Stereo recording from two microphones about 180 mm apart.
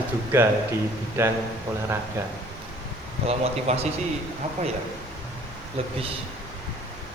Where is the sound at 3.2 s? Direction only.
35° right (ahead or behind).